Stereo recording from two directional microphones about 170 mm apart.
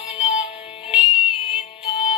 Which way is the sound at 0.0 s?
35° left (ahead or behind).